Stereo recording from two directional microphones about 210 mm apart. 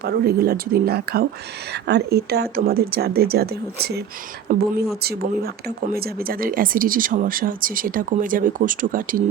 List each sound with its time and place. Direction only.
0.0 s a woman's voice: 45° right (ahead or behind)